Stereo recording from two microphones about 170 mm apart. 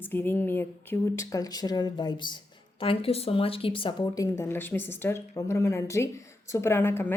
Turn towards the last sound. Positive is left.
turn(degrees=15)  # may be behind; listen again after turning